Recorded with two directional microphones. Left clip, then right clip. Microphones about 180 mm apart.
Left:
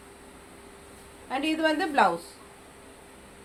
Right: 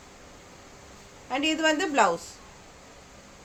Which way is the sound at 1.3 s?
30° right (ahead or behind).